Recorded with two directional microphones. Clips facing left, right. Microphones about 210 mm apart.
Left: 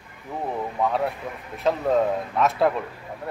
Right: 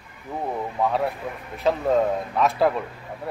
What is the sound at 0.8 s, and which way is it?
Speech, centre (ahead or behind).